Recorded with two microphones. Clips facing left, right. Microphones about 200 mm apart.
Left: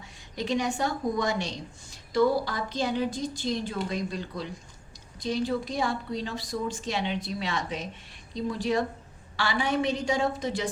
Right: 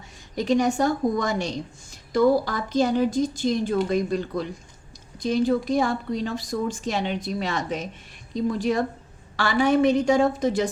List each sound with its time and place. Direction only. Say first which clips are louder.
0.3 s a woman's voice: right 7 dB; 45° right (ahead or behind)